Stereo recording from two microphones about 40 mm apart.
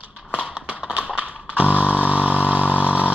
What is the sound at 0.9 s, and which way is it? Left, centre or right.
Chainsaw, right.